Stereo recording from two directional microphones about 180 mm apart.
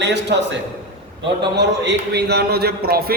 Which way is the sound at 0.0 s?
75° right (ahead or behind).